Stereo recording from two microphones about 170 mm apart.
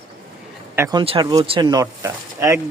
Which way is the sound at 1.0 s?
25° right (ahead or behind).